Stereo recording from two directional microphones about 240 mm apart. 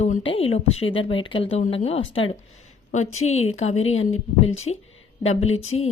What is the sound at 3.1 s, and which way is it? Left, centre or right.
Speech, left.